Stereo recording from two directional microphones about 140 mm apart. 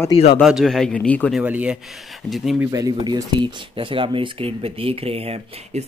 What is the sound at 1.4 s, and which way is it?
Speech, 10° right (ahead or behind).